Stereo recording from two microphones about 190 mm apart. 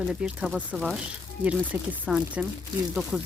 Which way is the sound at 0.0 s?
5° right (ahead or behind).